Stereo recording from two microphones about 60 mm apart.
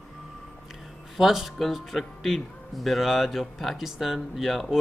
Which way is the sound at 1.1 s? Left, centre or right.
Centre.